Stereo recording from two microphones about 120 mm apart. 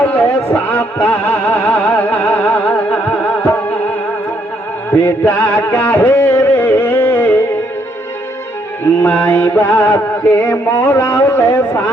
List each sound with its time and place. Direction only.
0.0 s a sound: 15° left (ahead or behind)
0.5 s music: 15° left (ahead or behind)
4.9 s music: 20° left (ahead or behind)
9.0 s mantra: 20° left (ahead or behind)